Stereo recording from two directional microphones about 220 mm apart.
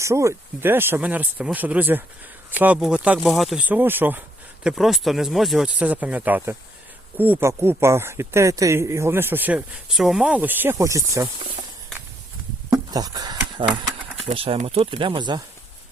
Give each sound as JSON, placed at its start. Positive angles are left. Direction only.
{"t": 0.0, "sound": "speech", "side_deg": -15}
{"t": 12.7, "sound": "speech", "side_deg": -15}